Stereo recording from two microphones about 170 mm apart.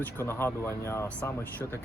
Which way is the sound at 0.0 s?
15° left (ahead or behind).